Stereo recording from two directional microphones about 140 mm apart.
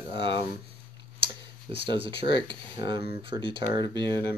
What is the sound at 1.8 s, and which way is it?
Speech, 40° right (ahead or behind).